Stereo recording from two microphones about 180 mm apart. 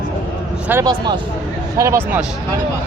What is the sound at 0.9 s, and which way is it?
A man's voice, 25° right (ahead or behind).